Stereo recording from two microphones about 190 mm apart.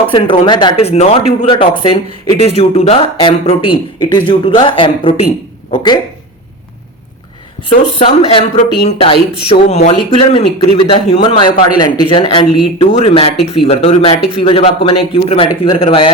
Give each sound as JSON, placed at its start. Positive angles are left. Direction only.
{"t": 0.1, "sound": "speech", "side_deg": 25}
{"t": 7.7, "sound": "speech", "side_deg": 30}